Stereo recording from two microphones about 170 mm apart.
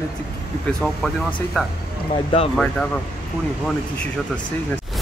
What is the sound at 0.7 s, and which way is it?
Speech, centre (ahead or behind).